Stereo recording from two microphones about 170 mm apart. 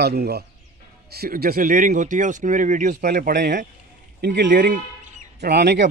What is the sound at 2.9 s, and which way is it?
Speech, 60° right (ahead or behind).